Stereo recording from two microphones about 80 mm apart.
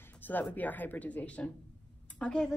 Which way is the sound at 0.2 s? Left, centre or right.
Left.